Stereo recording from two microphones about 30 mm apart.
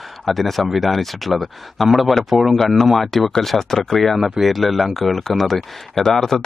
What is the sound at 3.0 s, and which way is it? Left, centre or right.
Speech, centre.